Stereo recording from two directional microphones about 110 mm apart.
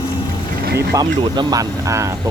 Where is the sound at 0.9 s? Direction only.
35° right (ahead or behind).